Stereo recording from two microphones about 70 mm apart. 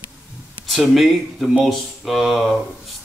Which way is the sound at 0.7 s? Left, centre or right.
Centre.